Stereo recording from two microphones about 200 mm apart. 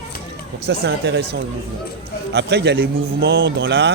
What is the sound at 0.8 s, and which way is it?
A man's voice, 55° right (ahead or behind).